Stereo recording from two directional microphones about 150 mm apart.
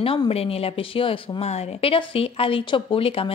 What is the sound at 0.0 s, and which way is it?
Speech, 40° left (ahead or behind).